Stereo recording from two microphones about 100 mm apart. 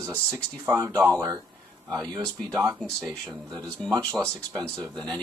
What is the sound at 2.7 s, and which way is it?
Speech, centre (ahead or behind).